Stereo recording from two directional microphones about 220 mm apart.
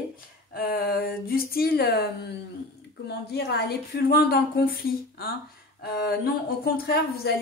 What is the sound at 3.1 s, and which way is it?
Speech, 45° left (ahead or behind).